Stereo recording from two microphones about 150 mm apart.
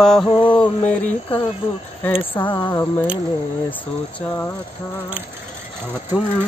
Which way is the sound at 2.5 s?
25° left (ahead or behind).